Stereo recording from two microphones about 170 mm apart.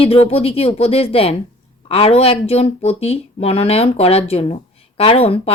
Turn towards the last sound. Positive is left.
turn(degrees=35)  # may be behind; listen again after turning